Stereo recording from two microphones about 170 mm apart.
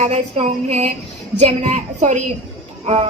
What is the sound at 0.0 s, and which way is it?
A woman's voice, 40° right (ahead or behind).